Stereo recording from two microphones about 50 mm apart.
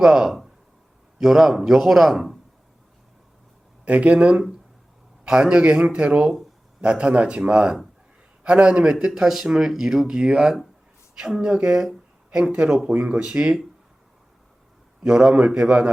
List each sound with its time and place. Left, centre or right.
0.0 s a man's voice: centre
3.8 s speech: right
15.0 s speech: centre